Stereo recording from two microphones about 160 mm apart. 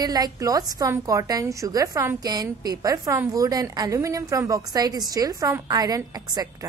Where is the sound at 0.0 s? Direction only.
25° right (ahead or behind).